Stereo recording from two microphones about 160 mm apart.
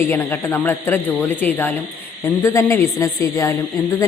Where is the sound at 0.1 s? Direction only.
15° left (ahead or behind).